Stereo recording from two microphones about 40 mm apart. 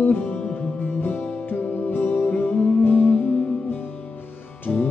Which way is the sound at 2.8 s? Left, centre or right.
Left.